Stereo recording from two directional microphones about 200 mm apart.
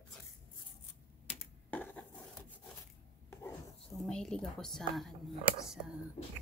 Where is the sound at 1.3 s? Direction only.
35° left (ahead or behind).